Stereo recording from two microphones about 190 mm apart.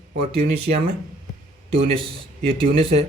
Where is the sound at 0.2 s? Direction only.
30° right (ahead or behind).